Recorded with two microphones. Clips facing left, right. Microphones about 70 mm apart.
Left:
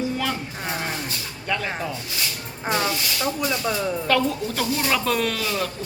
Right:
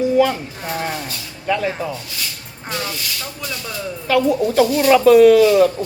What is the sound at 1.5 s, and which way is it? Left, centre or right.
Speech, centre.